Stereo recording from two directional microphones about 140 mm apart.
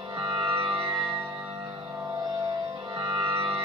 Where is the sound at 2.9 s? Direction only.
35° right (ahead or behind).